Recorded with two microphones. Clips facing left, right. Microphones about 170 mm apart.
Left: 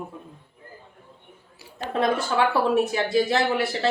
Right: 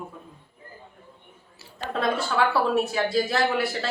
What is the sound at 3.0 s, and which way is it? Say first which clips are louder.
Speech: left 2 dB; 20° left (ahead or behind).